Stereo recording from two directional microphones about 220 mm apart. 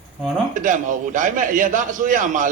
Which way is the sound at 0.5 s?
35° right (ahead or behind).